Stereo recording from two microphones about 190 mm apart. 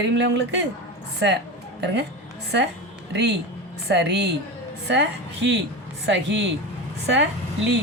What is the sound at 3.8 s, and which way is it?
A woman's voice, 60° right (ahead or behind).